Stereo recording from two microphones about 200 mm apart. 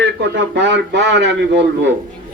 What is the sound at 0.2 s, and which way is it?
A man's voice, 65° right (ahead or behind).